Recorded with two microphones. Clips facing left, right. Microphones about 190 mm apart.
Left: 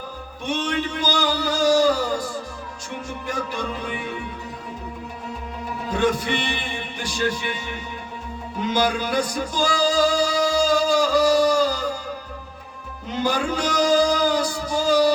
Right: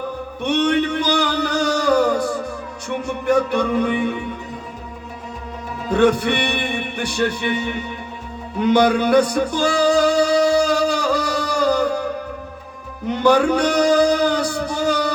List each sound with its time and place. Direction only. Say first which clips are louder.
0.4 s music: right 7 dB; 65° right (ahead or behind)
5.9 s music: right 6 dB; 65° right (ahead or behind)
13.1 s a sound: right 8 dB; 65° right (ahead or behind)